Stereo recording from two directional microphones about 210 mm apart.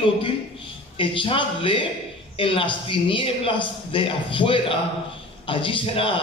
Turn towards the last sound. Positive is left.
turn(degrees=25)  # may be behind; listen again after turning